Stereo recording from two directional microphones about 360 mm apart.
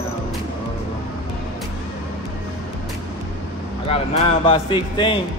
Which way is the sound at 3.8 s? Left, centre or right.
Centre.